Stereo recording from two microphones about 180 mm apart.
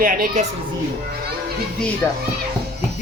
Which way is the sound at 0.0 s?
50° right (ahead or behind).